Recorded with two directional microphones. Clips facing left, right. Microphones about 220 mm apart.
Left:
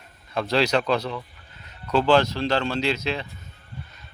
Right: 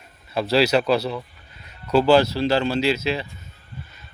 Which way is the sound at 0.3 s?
5° right (ahead or behind).